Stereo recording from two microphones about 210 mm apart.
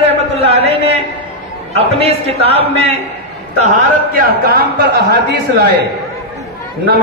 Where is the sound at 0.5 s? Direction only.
30° right (ahead or behind).